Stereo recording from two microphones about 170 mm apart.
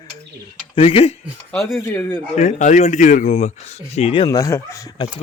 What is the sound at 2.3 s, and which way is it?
A man's voice, 45° left (ahead or behind).